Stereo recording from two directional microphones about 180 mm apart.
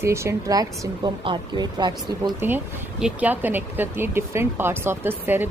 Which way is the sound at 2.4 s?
5° right (ahead or behind).